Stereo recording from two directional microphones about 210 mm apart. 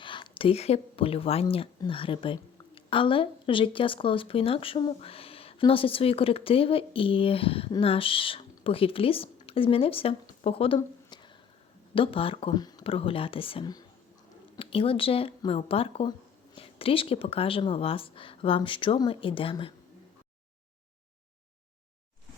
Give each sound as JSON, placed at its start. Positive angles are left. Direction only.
{"t": 0.0, "sound": "a woman's voice", "side_deg": 25}
{"t": 10.8, "sound": "a sound", "side_deg": 20}
{"t": 11.9, "sound": "a woman's voice", "side_deg": 25}